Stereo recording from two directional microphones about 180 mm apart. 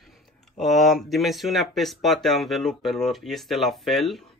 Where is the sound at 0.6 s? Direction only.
Centre (ahead or behind).